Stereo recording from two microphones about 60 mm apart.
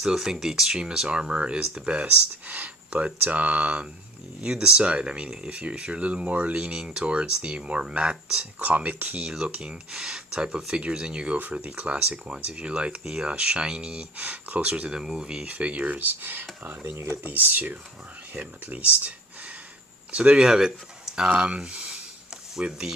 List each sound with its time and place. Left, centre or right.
0.0 s speech: centre
8.6 s speech: right
9.2 s speech: centre
14.3 s speech: right
14.7 s speech: centre
15.4 s speech: right
17.2 s speech: right
20.1 s speech: right
20.4 s speech: centre